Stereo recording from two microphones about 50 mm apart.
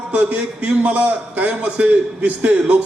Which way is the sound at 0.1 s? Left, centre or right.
Right.